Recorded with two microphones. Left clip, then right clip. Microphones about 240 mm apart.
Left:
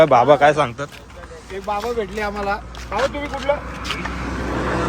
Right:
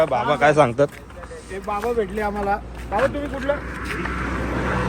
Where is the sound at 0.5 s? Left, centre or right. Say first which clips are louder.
Right 4 dB; centre.